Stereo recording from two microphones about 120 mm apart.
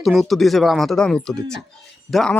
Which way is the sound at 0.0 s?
Centre (ahead or behind).